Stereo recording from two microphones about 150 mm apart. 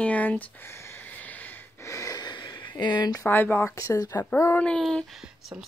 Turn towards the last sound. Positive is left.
turn(degrees=0)  # may be behind; listen again after turning